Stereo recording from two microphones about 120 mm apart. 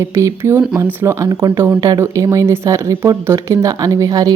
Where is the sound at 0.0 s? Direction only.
25° right (ahead or behind).